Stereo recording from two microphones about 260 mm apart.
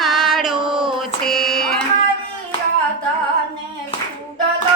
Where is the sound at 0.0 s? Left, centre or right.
Centre.